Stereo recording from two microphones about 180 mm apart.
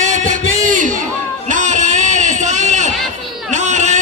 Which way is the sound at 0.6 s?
45° right (ahead or behind).